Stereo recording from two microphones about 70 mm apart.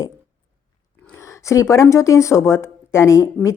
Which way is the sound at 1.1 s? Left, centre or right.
Left.